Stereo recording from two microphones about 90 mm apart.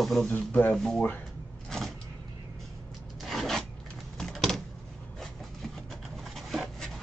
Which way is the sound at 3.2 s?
Centre (ahead or behind).